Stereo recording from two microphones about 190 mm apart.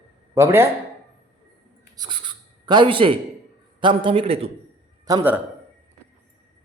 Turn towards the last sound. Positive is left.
turn(degrees=-20)  # may be behind; listen again after turning